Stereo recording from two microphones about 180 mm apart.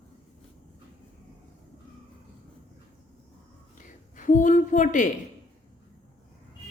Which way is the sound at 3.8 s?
45° left (ahead or behind).